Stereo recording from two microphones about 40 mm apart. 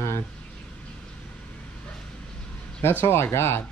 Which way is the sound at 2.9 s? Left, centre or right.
Left.